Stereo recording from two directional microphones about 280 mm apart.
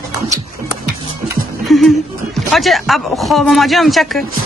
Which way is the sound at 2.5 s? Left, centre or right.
Centre.